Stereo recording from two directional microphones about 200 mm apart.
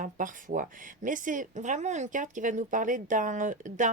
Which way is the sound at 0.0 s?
40° right (ahead or behind).